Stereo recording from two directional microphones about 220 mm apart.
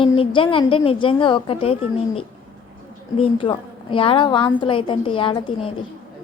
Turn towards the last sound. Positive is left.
turn(degrees=25)  # may be behind; listen again after turning